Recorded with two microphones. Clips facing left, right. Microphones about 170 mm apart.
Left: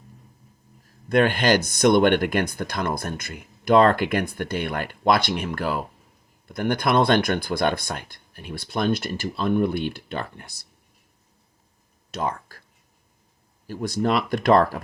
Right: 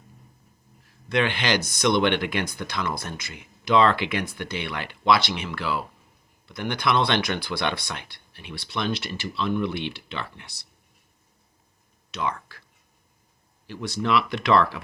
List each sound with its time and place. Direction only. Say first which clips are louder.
0.9 s speech: left 5 dB; 45° left (ahead or behind)
12.5 s a sound: left 2 dB; 45° left (ahead or behind)
13.7 s speech: left 3 dB; 45° left (ahead or behind)